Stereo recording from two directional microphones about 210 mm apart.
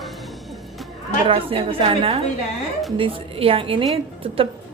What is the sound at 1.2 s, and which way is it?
A woman's voice, 25° right (ahead or behind).